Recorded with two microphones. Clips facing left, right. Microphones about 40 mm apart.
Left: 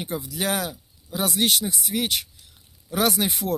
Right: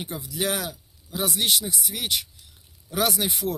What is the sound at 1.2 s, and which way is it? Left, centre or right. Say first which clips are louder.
Speech: left 2 dB; left.